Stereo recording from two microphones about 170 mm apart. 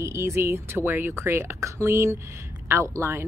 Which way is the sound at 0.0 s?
15° right (ahead or behind).